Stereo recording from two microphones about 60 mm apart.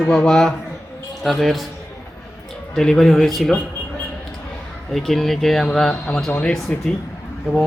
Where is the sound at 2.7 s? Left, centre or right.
Centre.